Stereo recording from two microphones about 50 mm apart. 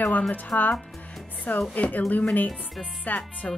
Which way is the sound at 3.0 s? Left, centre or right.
Left.